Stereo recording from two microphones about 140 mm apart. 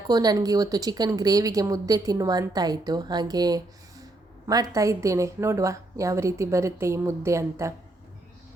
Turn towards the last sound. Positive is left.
turn(degrees=-20)  # may be behind; listen again after turning